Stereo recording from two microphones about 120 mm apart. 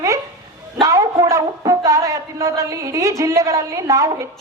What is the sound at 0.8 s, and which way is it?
A man's voice, 30° right (ahead or behind).